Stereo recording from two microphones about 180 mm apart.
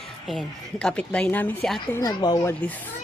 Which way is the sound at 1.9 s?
20° left (ahead or behind).